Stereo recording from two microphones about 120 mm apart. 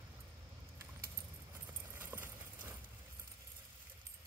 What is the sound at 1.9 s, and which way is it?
Clip-clop, 15° right (ahead or behind).